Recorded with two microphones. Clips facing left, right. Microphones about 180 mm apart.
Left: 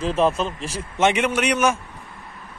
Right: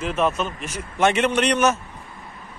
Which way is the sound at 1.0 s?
10° left (ahead or behind).